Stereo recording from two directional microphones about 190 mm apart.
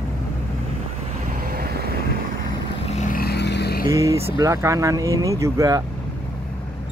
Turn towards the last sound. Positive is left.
turn(degrees=-20)  # may be behind; listen again after turning